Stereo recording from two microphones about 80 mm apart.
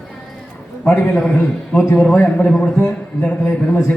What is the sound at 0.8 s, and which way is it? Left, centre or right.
A man's voice, left.